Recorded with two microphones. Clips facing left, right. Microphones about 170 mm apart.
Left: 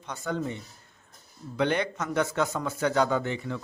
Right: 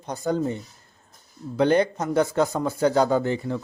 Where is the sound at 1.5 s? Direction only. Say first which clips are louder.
Right 7 dB; 35° right (ahead or behind).